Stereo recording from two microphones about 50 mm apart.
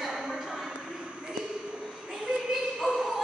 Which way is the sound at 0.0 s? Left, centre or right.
Centre.